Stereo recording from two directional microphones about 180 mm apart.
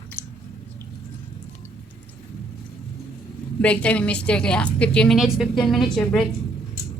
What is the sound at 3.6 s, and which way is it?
A woman's voice, 5° left (ahead or behind).